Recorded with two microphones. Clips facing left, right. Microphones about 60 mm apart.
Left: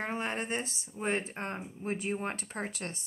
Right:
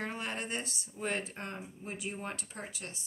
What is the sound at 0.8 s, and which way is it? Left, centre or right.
Speech, left.